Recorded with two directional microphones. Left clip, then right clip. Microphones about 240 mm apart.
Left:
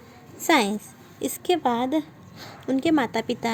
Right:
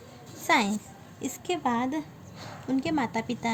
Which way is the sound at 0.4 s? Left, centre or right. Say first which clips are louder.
Left 4 dB; left.